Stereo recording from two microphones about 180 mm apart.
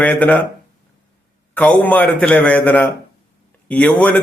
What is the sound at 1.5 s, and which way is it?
A man's voice, 10° left (ahead or behind).